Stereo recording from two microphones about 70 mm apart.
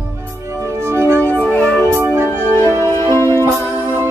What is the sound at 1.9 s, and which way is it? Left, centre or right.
Music, right.